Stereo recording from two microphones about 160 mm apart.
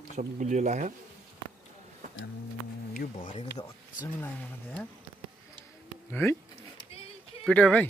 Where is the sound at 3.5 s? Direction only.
55° left (ahead or behind).